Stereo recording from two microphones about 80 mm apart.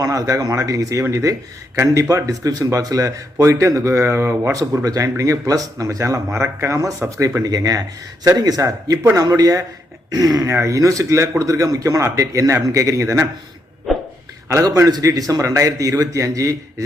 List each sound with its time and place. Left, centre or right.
0.0 s speech: right
4.5 s speech: right
7.4 s speech: right
13.9 s a sound: centre
15.0 s speech: right